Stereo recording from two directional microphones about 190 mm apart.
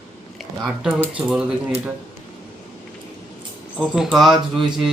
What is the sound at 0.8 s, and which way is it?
Speech, centre (ahead or behind).